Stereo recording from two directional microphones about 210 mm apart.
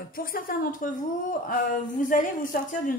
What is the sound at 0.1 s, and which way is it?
A woman's voice, 45° left (ahead or behind).